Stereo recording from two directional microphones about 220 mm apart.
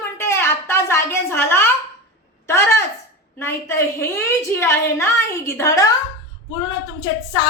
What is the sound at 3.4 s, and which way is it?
A woman's voice, 10° left (ahead or behind).